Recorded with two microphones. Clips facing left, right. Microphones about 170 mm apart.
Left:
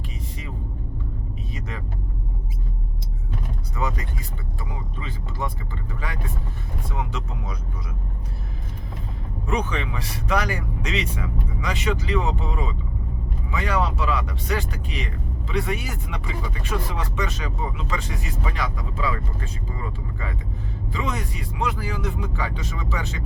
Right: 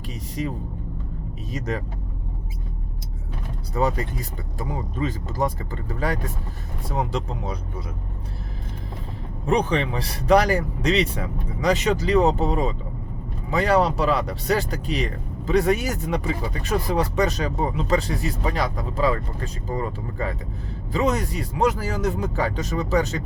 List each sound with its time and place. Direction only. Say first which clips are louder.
1.5 s speech: right 9 dB; 40° right (ahead or behind)
3.8 s speech: right 6 dB; 35° right (ahead or behind)
9.5 s speech: right 5 dB; 35° right (ahead or behind)